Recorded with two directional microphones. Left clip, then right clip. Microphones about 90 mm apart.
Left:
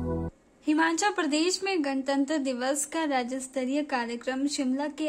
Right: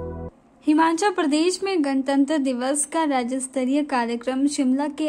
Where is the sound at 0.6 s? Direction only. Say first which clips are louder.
Right 6 dB; 20° right (ahead or behind).